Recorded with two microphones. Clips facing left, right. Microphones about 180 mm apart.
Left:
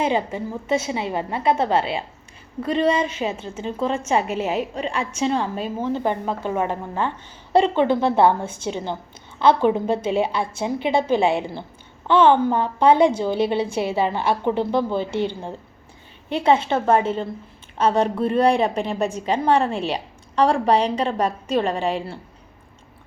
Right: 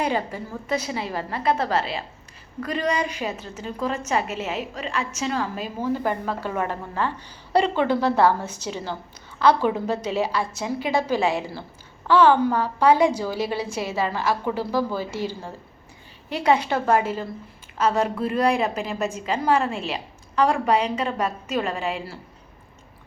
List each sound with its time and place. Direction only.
0.0 s a woman's voice: 25° left (ahead or behind)
8.4 s a woman's voice: 50° left (ahead or behind)
8.7 s a woman's voice: 20° left (ahead or behind)
16.3 s a woman's voice: 25° left (ahead or behind)